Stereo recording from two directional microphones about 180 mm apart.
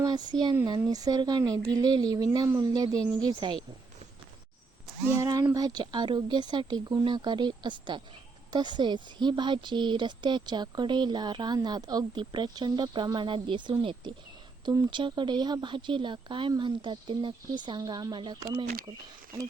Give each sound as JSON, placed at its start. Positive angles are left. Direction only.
{"t": 0.0, "sound": "speech", "side_deg": -20}
{"t": 5.1, "sound": "speech", "side_deg": -20}